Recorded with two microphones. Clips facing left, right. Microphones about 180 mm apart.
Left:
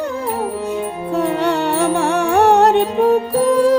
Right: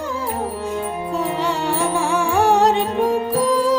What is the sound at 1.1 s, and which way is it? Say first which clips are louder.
Music: left 6 dB; 65° left (ahead or behind).